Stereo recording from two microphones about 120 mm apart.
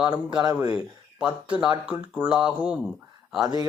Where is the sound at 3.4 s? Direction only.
35° right (ahead or behind).